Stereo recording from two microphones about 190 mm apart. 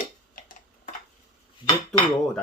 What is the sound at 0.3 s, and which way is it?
Tick-tock, 45° left (ahead or behind).